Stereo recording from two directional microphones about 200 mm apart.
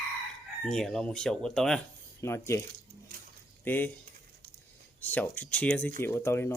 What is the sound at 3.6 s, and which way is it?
Speech, 10° left (ahead or behind).